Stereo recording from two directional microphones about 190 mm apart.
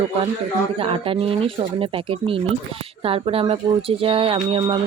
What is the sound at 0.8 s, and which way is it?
Speech, 30° right (ahead or behind).